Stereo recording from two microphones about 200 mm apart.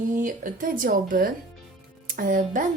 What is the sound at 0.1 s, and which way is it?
A woman's voice, 40° right (ahead or behind).